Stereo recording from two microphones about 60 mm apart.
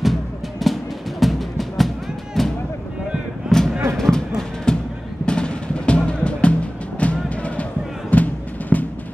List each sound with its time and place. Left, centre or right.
0.0 s music: centre
3.4 s a sound: centre
4.7 s music: centre